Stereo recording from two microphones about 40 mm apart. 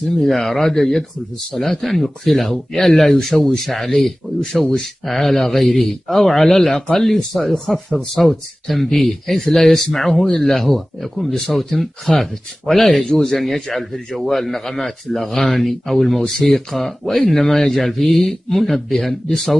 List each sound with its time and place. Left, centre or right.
0.2 s a man's voice: centre
10.2 s speech: left
10.5 s a man's voice: centre